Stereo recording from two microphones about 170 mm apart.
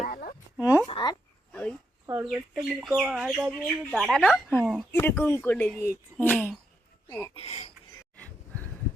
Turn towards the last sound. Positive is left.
turn(degrees=40)  # may be behind; listen again after turning